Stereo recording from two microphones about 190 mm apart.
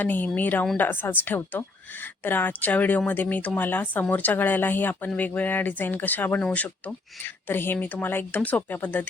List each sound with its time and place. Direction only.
0.0 s speech: 10° left (ahead or behind)